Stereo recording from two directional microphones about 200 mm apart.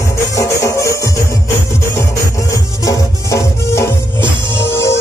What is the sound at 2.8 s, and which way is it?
Music, 15° left (ahead or behind).